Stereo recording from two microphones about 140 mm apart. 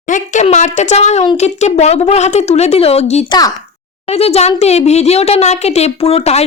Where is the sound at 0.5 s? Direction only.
55° left (ahead or behind).